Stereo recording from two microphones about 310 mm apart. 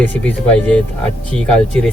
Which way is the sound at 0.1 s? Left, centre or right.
Centre.